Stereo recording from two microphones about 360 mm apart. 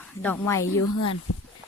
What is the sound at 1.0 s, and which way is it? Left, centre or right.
Speech, left.